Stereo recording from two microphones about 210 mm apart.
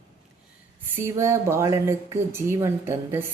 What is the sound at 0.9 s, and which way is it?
Speech, 15° right (ahead or behind).